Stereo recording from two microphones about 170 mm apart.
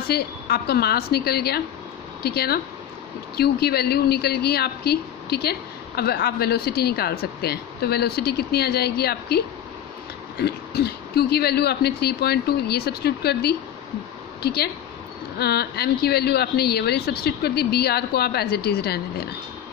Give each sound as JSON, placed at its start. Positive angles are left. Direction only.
{"t": 0.1, "sound": "a woman's voice", "side_deg": 70}
{"t": 10.4, "sound": "a woman's voice", "side_deg": 70}